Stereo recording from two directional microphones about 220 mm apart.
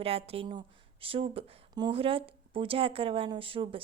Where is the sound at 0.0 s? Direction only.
25° right (ahead or behind).